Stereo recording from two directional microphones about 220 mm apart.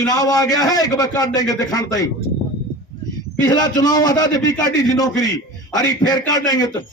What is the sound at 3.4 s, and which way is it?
A man's voice, 15° left (ahead or behind).